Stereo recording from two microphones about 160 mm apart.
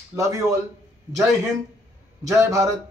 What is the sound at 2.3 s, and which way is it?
Speech, 20° right (ahead or behind).